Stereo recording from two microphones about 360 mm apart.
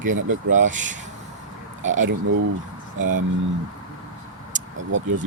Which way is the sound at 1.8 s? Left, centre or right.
Right.